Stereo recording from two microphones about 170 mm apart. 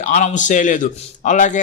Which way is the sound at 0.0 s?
45° left (ahead or behind).